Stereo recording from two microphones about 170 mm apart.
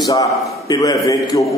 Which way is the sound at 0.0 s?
20° left (ahead or behind).